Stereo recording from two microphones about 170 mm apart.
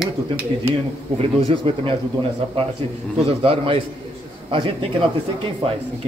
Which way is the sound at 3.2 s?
35° right (ahead or behind).